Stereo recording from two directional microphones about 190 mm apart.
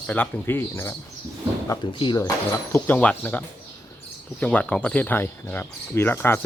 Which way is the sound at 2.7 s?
10° left (ahead or behind).